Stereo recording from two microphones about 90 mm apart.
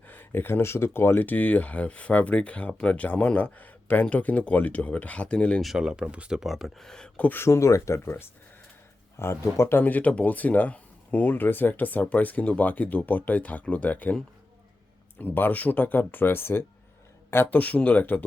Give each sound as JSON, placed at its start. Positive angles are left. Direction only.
{"t": 0.1, "sound": "speech", "side_deg": 25}
{"t": 5.6, "sound": "speech", "side_deg": -5}
{"t": 7.3, "sound": "speech", "side_deg": 30}
{"t": 15.2, "sound": "speech", "side_deg": 20}